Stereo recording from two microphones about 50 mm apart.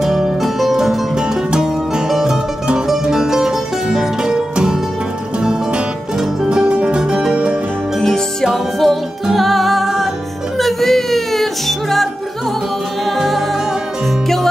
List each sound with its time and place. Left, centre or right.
0.0 s music: centre
8.0 s music: centre
8.7 s music: centre